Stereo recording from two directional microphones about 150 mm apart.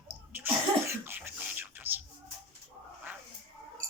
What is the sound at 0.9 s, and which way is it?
Beatboxing, 10° right (ahead or behind).